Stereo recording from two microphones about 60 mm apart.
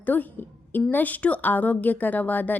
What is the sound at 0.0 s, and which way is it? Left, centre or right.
A woman's voice, left.